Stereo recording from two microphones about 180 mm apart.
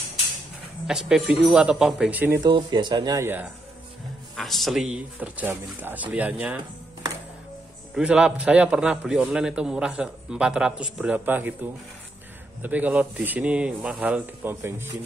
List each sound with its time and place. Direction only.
0.8 s a man's voice: 5° right (ahead or behind)
2.4 s speech: 25° right (ahead or behind)
4.4 s speech: centre (ahead or behind)
7.9 s a man's voice: 5° right (ahead or behind)